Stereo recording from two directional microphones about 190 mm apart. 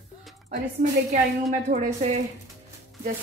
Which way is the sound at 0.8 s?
45° right (ahead or behind).